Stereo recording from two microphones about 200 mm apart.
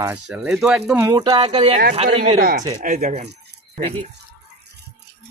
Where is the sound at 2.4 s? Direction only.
45° right (ahead or behind).